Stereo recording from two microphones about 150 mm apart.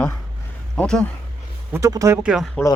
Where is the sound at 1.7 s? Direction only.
20° right (ahead or behind).